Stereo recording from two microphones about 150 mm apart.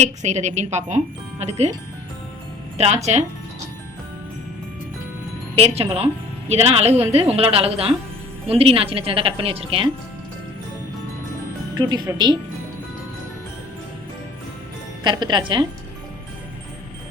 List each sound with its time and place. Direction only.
0.0 s speech: 50° right (ahead or behind)
2.7 s speech: 50° right (ahead or behind)
5.5 s a woman's voice: 40° right (ahead or behind)
11.7 s speech: 25° right (ahead or behind)
15.0 s a woman's voice: 30° right (ahead or behind)